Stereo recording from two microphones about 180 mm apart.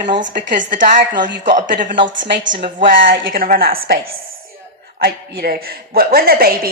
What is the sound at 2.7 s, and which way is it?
A woman's voice, 50° right (ahead or behind).